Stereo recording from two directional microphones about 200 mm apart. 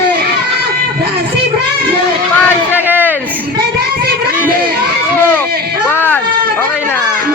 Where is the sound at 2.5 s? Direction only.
10° left (ahead or behind).